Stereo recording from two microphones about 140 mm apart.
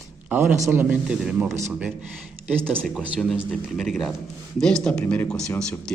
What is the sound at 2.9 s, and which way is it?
A man's voice, 5° right (ahead or behind).